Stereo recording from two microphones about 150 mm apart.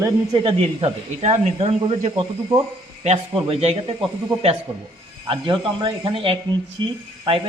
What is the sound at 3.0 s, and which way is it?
Speech, 40° right (ahead or behind).